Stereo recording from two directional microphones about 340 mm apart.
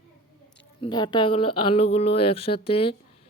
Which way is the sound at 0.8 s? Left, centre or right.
Centre.